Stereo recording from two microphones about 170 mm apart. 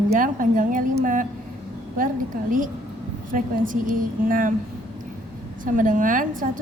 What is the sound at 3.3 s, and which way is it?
A woman's voice, 50° right (ahead or behind).